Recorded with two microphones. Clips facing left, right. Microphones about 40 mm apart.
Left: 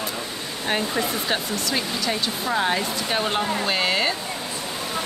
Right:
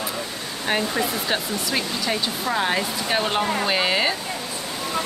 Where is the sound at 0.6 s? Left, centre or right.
Centre.